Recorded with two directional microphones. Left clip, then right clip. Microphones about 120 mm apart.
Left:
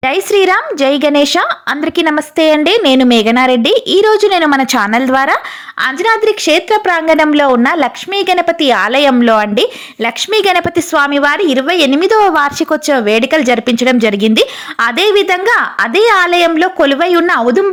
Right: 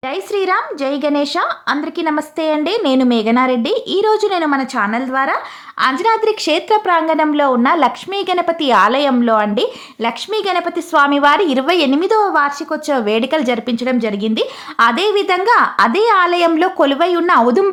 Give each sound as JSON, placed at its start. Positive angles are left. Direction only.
{"t": 0.3, "sound": "a woman's voice", "side_deg": 35}
{"t": 4.7, "sound": "a woman's voice", "side_deg": 60}
{"t": 5.8, "sound": "a woman's voice", "side_deg": 15}
{"t": 7.1, "sound": "a woman's voice", "side_deg": 30}
{"t": 8.3, "sound": "a woman's voice", "side_deg": 20}
{"t": 8.9, "sound": "a woman's voice", "side_deg": 30}
{"t": 11.1, "sound": "a woman's voice", "side_deg": 15}
{"t": 11.9, "sound": "a woman's voice", "side_deg": 20}
{"t": 12.2, "sound": "a woman's voice", "side_deg": 40}
{"t": 12.9, "sound": "a woman's voice", "side_deg": 15}
{"t": 16.6, "sound": "a woman's voice", "side_deg": 10}
{"t": 17.0, "sound": "a woman's voice", "side_deg": 25}
{"t": 17.4, "sound": "a woman's voice", "side_deg": 5}